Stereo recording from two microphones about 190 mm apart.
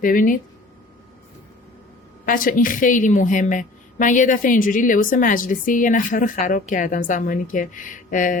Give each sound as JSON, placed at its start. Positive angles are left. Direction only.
{"t": 0.0, "sound": "a woman's voice", "side_deg": 45}
{"t": 2.2, "sound": "a woman's voice", "side_deg": 45}